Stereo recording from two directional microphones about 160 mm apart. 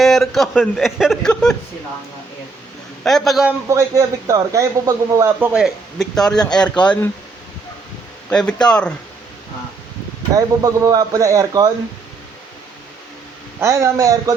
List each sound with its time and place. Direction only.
0.0 s speech: centre (ahead or behind)
3.0 s speech: centre (ahead or behind)
3.7 s a man's voice: 20° right (ahead or behind)
5.5 s speech: centre (ahead or behind)
8.3 s speech: 5° left (ahead or behind)
10.3 s a man's voice: 20° right (ahead or behind)
13.6 s a man's voice: 20° right (ahead or behind)